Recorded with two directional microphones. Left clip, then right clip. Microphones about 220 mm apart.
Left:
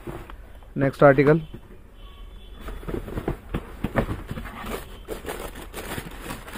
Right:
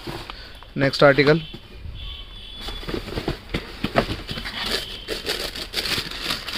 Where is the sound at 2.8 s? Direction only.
Centre (ahead or behind).